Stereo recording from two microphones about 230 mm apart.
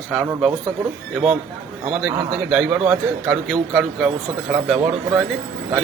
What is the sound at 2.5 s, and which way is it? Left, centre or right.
A man's voice, centre.